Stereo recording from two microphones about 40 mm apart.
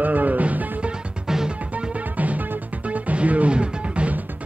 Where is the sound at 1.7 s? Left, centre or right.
Right.